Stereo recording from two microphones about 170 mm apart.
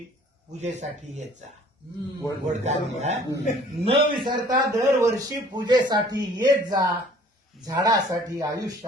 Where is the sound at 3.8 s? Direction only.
30° right (ahead or behind).